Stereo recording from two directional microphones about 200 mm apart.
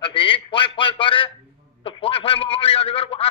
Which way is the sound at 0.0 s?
25° left (ahead or behind).